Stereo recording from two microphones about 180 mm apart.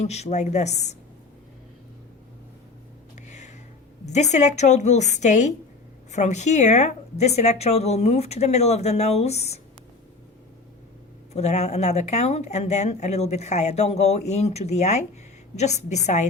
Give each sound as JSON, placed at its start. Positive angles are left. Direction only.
{"t": 0.0, "sound": "speech", "side_deg": 40}
{"t": 3.2, "sound": "a sound", "side_deg": 40}
{"t": 4.0, "sound": "speech", "side_deg": 40}
{"t": 11.3, "sound": "speech", "side_deg": 40}